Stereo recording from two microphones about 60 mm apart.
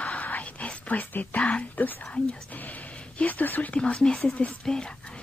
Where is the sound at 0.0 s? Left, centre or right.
Left.